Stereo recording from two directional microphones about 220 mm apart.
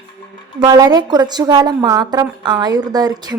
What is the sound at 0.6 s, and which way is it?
A woman's voice, 20° right (ahead or behind).